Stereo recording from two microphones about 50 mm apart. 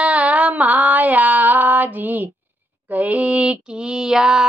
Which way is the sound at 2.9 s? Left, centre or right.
Right.